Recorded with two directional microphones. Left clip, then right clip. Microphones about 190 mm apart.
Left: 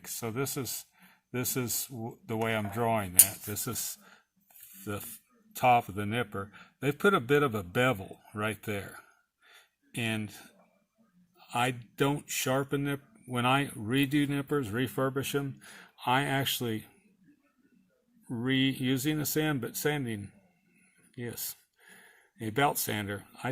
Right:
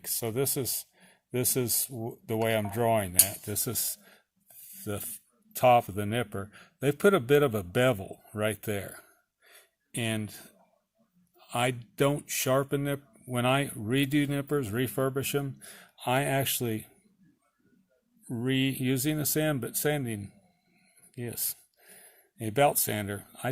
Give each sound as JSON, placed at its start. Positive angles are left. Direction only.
{"t": 0.0, "sound": "speech", "side_deg": -40}
{"t": 4.7, "sound": "a sound", "side_deg": -40}
{"t": 5.5, "sound": "speech", "side_deg": -40}
{"t": 18.3, "sound": "speech", "side_deg": -35}